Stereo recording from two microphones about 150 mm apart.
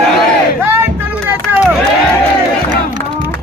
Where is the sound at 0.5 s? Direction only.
15° right (ahead or behind).